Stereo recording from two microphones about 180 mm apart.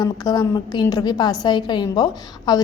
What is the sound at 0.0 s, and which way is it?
A woman's voice, 20° left (ahead or behind).